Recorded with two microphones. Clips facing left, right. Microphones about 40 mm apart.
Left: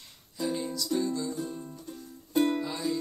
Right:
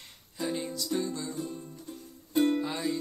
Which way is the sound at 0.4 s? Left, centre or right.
Centre.